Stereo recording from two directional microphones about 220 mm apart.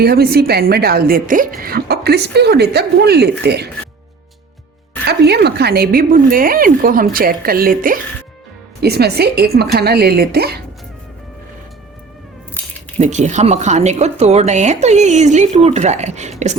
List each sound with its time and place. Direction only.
0.0 s a woman's voice: 45° right (ahead or behind)
5.0 s a woman's voice: 50° right (ahead or behind)
13.0 s speech: 30° right (ahead or behind)